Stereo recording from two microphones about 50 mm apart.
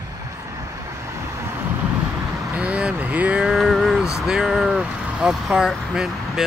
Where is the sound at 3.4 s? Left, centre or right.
Centre.